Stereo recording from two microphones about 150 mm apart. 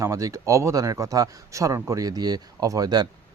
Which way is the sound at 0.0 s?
20° right (ahead or behind).